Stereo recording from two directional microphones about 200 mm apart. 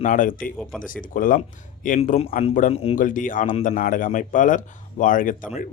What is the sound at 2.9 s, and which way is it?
A man's voice, 40° left (ahead or behind).